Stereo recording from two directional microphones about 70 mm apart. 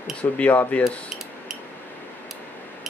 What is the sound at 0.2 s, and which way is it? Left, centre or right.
Speech, left.